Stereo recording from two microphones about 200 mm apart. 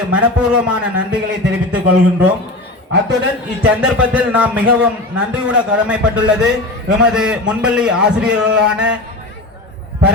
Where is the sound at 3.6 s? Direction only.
5° right (ahead or behind).